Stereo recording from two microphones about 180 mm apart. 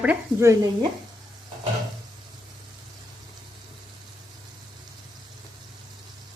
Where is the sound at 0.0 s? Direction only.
10° right (ahead or behind).